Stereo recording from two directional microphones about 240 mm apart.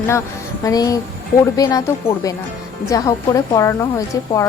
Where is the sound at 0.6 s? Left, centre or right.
Centre.